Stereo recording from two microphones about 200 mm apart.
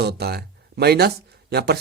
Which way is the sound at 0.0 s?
55° right (ahead or behind).